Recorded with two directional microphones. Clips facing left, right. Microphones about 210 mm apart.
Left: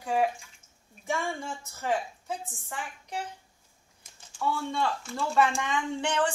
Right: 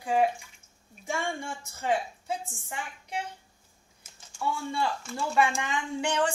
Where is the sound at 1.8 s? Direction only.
10° right (ahead or behind).